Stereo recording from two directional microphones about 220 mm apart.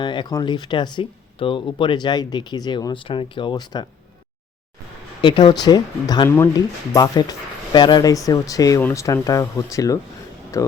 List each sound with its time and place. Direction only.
0.0 s speech: 20° left (ahead or behind)
5.2 s speech: 20° left (ahead or behind)